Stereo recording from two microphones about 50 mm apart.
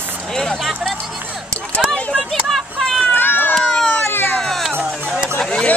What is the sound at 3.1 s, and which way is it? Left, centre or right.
Run, left.